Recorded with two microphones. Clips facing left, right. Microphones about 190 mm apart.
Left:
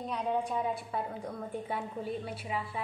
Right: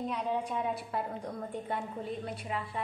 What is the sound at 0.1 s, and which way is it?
A woman's voice, centre (ahead or behind).